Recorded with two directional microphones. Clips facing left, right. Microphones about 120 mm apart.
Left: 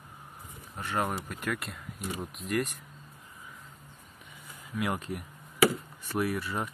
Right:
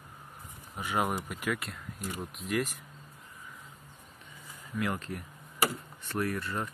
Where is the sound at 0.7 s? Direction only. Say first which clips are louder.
Right 1 dB; 10° right (ahead or behind).